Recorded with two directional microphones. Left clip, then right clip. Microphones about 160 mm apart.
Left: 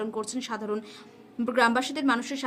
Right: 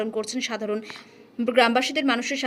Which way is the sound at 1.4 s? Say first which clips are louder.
Right 4 dB; 20° right (ahead or behind).